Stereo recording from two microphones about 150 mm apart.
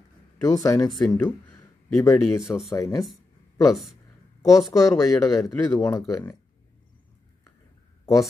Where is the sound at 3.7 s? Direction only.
Centre (ahead or behind).